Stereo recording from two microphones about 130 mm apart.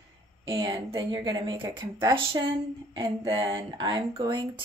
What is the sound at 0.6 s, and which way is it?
Speech, 35° right (ahead or behind).